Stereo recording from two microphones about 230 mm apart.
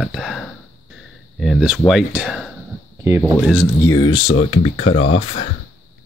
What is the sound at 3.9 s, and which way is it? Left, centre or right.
Speech, centre.